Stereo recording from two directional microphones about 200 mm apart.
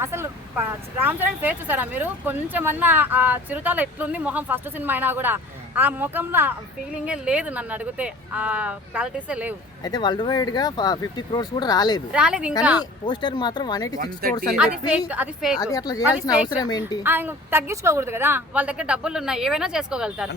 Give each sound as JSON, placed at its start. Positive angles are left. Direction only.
{"t": 0.0, "sound": "speech", "side_deg": -10}
{"t": 9.8, "sound": "speech", "side_deg": 20}
{"t": 12.1, "sound": "a woman's voice", "side_deg": -5}
{"t": 12.8, "sound": "speech", "side_deg": 20}
{"t": 14.0, "sound": "speech", "side_deg": -45}
{"t": 14.5, "sound": "a woman's voice", "side_deg": -5}
{"t": 15.6, "sound": "speech", "side_deg": 20}
{"t": 17.0, "sound": "speech", "side_deg": -10}